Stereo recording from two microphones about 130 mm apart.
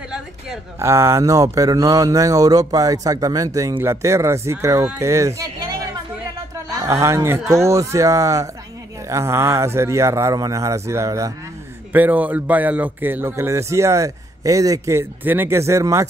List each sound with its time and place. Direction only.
0.7 s a man's voice: 20° right (ahead or behind)
11.9 s a man's voice: 15° right (ahead or behind)